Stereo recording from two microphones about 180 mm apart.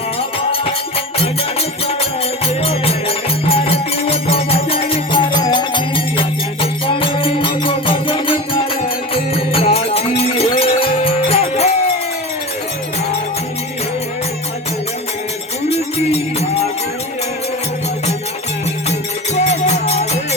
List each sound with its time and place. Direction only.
0.2 s music: 30° left (ahead or behind)
2.5 s music: 35° left (ahead or behind)
15.7 s music: 35° left (ahead or behind)
18.9 s music: 40° left (ahead or behind)